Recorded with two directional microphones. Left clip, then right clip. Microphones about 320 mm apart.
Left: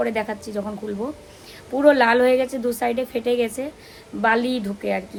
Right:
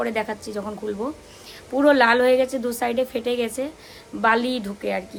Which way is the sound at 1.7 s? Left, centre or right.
Centre.